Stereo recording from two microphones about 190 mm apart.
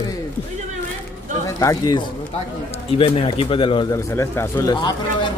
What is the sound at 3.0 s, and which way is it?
Speech, 30° left (ahead or behind).